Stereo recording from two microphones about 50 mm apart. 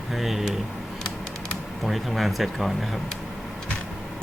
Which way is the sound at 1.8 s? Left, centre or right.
Centre.